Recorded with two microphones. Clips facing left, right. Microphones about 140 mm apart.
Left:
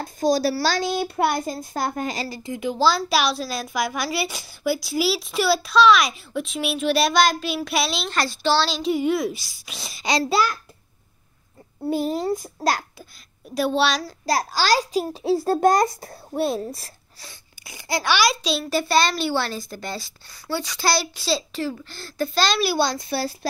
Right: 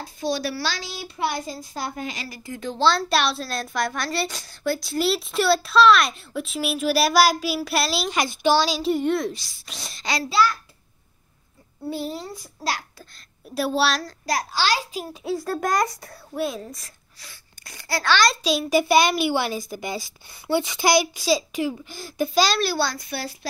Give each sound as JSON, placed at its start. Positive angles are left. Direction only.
{"t": 0.0, "sound": "a child's voice", "side_deg": 40}
{"t": 2.2, "sound": "a child's voice", "side_deg": 25}
{"t": 2.5, "sound": "a woman's voice", "side_deg": 10}
{"t": 8.9, "sound": "a woman's voice", "side_deg": 5}
{"t": 10.3, "sound": "a child's voice", "side_deg": 50}
{"t": 11.9, "sound": "a child's voice", "side_deg": 45}
{"t": 13.6, "sound": "a woman's voice", "side_deg": -5}
{"t": 14.2, "sound": "a child's voice", "side_deg": 35}
{"t": 17.6, "sound": "a child's voice", "side_deg": 15}
{"t": 18.3, "sound": "speech", "side_deg": -10}
{"t": 22.6, "sound": "a child's voice", "side_deg": 15}